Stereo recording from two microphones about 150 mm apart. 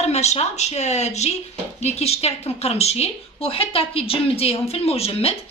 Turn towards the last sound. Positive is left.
turn(degrees=40)  # may be behind; listen again after turning